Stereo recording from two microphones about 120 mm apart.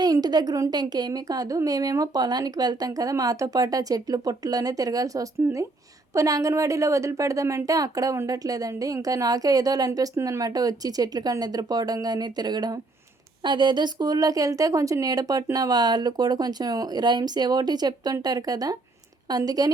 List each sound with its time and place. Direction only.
0.0 s a woman's voice: 35° right (ahead or behind)